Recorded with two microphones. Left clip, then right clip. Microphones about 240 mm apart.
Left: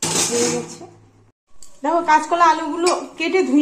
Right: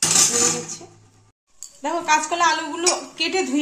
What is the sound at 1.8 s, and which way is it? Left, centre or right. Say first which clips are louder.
Speech: left 4 dB; centre.